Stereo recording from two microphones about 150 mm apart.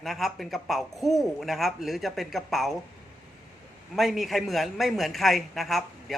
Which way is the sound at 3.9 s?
Centre (ahead or behind).